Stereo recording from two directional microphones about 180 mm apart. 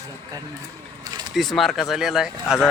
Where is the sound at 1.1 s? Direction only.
25° right (ahead or behind).